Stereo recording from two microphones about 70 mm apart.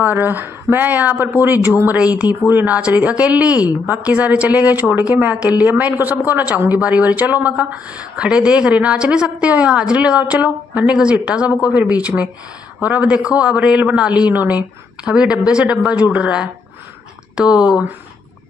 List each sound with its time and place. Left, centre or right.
0.0 s a woman's voice: right
2.0 s a woman's voice: centre
15.0 s a woman's voice: centre
17.6 s a woman's voice: centre